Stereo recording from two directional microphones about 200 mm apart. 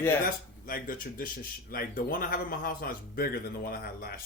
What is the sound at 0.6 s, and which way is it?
Speech, 45° left (ahead or behind).